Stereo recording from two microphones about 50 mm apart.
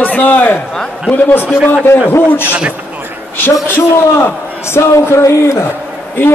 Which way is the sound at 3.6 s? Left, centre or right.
Left.